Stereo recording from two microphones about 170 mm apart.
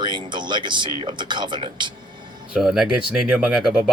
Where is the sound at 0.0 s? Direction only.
25° right (ahead or behind).